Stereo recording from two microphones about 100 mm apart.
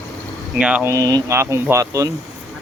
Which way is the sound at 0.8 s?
35° right (ahead or behind).